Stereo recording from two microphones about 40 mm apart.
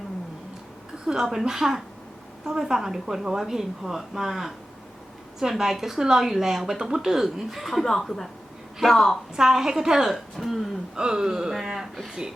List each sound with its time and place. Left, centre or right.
1.0 s a woman's voice: centre
9.3 s a woman's voice: centre
10.9 s a woman's voice: centre